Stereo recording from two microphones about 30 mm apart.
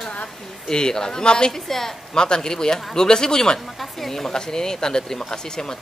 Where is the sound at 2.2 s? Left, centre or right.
Left.